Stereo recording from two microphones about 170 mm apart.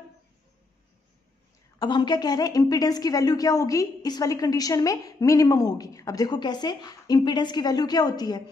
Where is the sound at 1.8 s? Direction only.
25° left (ahead or behind).